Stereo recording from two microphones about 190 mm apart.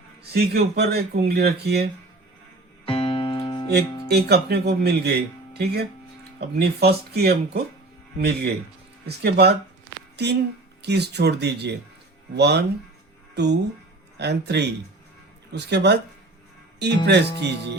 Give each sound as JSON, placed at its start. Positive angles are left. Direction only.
{"t": 0.3, "sound": "speech", "side_deg": -55}
{"t": 2.8, "sound": "music", "side_deg": 30}
{"t": 4.1, "sound": "speech", "side_deg": -60}
{"t": 17.1, "sound": "speech", "side_deg": -65}